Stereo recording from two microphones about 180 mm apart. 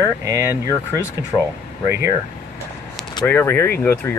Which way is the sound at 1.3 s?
20° left (ahead or behind).